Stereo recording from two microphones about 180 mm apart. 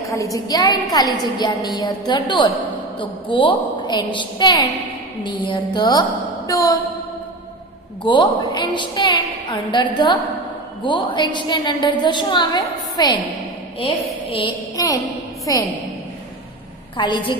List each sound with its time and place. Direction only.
0.1 s a woman's voice: 20° left (ahead or behind)
8.0 s a woman's voice: 25° left (ahead or behind)
14.8 s a woman's voice: 20° left (ahead or behind)
16.9 s a woman's voice: 25° left (ahead or behind)